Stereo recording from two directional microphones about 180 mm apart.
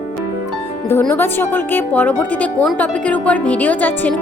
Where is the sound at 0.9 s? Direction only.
10° left (ahead or behind).